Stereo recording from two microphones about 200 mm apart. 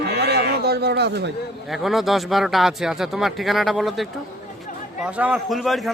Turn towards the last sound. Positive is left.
turn(degrees=0)  # may be behind; listen again after turning